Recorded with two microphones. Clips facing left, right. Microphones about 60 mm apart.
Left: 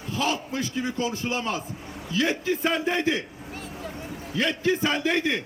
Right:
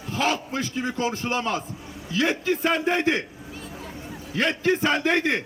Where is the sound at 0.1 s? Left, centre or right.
Right.